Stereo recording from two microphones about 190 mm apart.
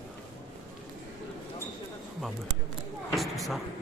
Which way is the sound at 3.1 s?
Centre (ahead or behind).